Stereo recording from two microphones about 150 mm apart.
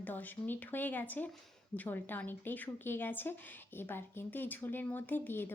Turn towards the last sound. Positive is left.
turn(degrees=15)  # may be behind; listen again after turning